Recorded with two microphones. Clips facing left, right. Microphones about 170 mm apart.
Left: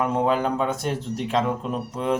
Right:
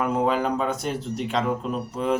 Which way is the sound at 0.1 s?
Centre (ahead or behind).